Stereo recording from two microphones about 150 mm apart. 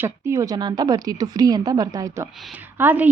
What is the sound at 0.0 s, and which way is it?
A woman's voice, 20° right (ahead or behind).